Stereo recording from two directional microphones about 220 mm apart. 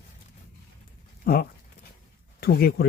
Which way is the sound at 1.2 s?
45° left (ahead or behind).